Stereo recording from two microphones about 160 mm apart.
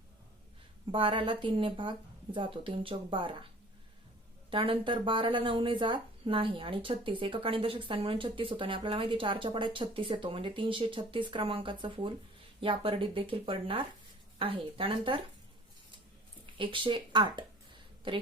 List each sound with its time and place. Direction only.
0.9 s speech: 30° right (ahead or behind)
4.5 s speech: 35° right (ahead or behind)
16.6 s speech: 30° right (ahead or behind)